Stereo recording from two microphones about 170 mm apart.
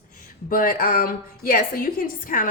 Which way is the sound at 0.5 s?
55° left (ahead or behind).